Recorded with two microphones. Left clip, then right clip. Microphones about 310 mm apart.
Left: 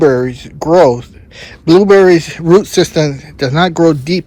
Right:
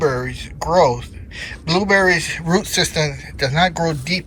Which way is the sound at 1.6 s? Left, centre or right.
Centre.